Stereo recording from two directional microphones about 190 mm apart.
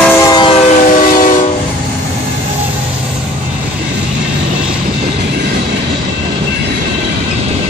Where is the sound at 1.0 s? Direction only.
45° left (ahead or behind).